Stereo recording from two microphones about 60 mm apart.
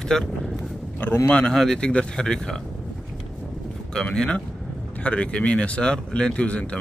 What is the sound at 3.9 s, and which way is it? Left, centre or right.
Speech, centre.